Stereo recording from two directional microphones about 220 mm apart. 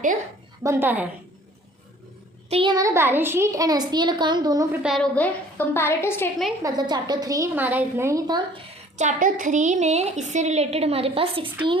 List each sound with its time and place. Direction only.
0.6 s a child's voice: 10° right (ahead or behind)
2.5 s a child's voice: 20° right (ahead or behind)
4.8 s a woman's voice: centre (ahead or behind)
6.6 s a child's voice: 15° right (ahead or behind)
9.0 s a woman's voice: 35° right (ahead or behind)